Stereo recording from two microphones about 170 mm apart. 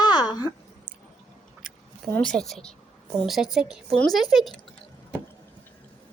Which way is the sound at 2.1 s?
5° left (ahead or behind).